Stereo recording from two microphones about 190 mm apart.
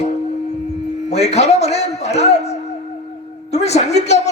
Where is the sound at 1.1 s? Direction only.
35° left (ahead or behind).